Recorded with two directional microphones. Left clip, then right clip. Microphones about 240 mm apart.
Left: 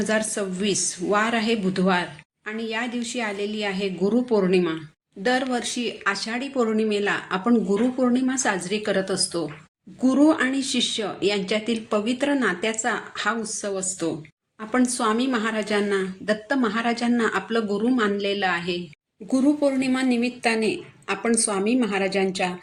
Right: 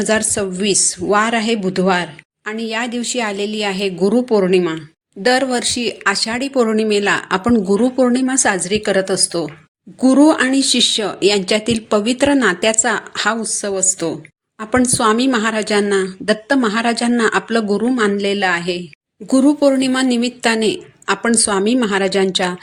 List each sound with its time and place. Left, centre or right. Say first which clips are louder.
0.0 s a woman's voice: right 7 dB; right